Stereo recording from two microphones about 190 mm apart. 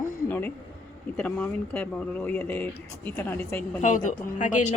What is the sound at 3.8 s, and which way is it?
Speech, 40° left (ahead or behind).